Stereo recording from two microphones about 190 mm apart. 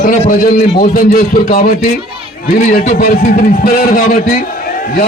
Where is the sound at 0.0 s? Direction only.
40° left (ahead or behind).